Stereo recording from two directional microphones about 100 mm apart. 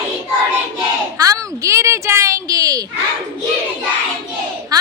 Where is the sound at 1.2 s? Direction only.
35° right (ahead or behind).